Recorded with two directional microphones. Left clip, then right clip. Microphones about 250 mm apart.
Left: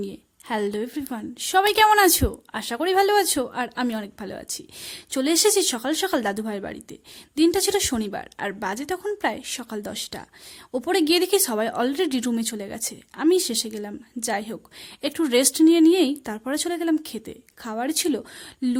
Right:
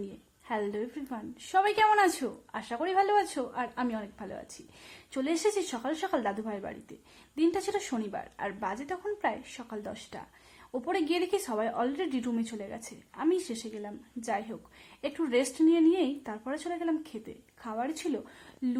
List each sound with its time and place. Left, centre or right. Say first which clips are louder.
0.4 s a woman's voice: left 7 dB; left